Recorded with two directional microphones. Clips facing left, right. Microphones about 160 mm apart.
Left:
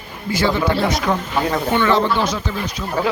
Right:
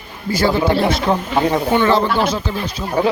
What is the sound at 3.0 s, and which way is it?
Speech, 20° right (ahead or behind).